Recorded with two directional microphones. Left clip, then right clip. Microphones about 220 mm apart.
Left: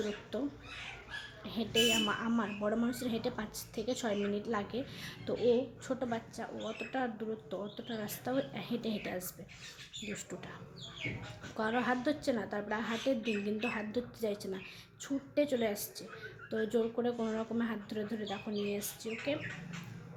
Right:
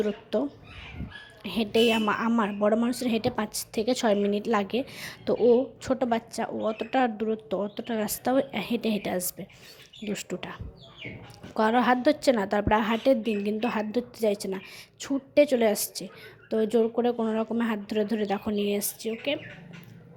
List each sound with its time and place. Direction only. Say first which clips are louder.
0.3 s a woman's voice: right 10 dB; 30° right (ahead or behind)
11.5 s a woman's voice: right 11 dB; 35° right (ahead or behind)